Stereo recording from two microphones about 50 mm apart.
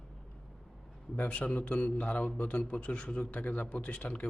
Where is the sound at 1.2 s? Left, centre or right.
Left.